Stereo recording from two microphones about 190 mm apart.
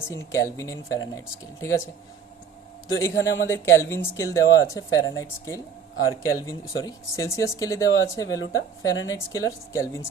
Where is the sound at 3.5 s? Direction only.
15° left (ahead or behind).